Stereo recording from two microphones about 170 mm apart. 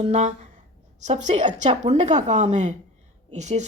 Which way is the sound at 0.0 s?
40° right (ahead or behind).